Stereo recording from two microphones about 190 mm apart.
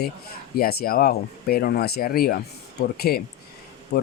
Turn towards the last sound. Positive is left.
turn(degrees=50)  # may be behind; listen again after turning